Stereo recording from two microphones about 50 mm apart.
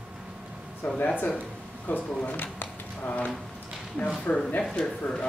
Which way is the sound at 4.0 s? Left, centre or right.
Left.